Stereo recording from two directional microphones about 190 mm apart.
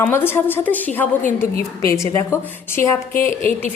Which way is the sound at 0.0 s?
10° left (ahead or behind).